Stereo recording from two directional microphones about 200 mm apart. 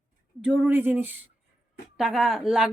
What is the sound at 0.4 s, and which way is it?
Speech, 5° right (ahead or behind).